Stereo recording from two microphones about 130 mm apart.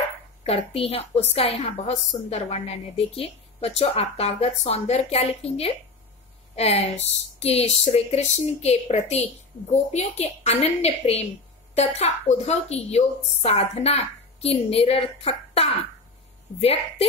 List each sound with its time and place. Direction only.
0.4 s a woman's voice: 50° left (ahead or behind)